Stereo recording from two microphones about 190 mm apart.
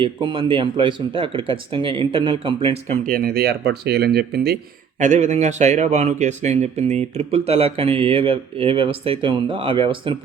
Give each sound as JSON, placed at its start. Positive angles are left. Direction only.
{"t": 0.0, "sound": "speech", "side_deg": -25}
{"t": 3.1, "sound": "speech", "side_deg": -50}
{"t": 4.9, "sound": "a man's voice", "side_deg": -40}